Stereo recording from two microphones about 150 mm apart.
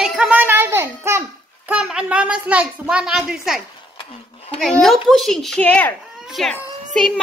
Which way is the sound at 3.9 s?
40° left (ahead or behind).